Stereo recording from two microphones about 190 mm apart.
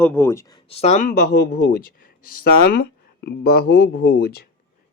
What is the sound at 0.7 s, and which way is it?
Speech, 35° left (ahead or behind).